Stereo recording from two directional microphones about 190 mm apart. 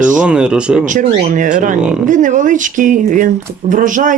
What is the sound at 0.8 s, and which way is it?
Speech, 40° right (ahead or behind).